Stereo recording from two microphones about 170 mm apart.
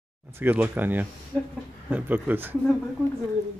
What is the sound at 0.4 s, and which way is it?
Speech, 10° right (ahead or behind).